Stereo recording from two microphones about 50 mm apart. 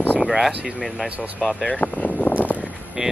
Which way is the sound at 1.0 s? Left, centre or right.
Right.